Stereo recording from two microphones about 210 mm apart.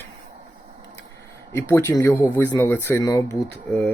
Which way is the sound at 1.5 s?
10° left (ahead or behind).